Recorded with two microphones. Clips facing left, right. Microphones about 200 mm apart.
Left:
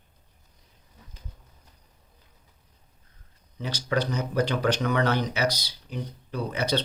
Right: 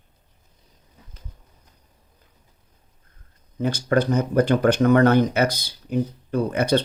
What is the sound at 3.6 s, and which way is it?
Speech, 50° right (ahead or behind).